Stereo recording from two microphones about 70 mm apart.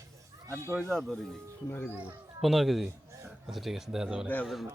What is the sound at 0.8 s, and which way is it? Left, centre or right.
Speech, centre.